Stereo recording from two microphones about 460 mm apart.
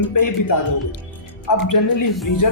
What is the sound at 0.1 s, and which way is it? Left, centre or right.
Speech, left.